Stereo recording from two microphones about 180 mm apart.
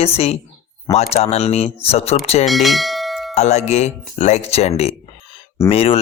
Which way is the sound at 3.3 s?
40° left (ahead or behind).